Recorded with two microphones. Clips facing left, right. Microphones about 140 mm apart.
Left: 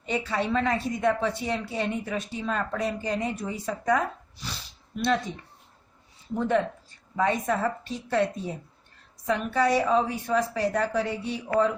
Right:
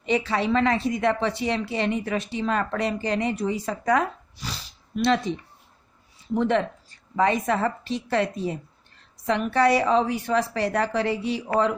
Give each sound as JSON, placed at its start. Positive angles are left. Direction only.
{"t": 0.0, "sound": "a woman's voice", "side_deg": -90}
{"t": 6.3, "sound": "a woman's voice", "side_deg": -80}
{"t": 9.2, "sound": "a woman's voice", "side_deg": -75}